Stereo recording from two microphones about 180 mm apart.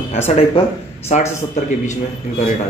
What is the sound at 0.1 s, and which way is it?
Speech, 35° left (ahead or behind).